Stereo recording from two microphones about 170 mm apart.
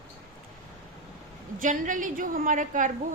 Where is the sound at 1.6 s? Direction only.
50° right (ahead or behind).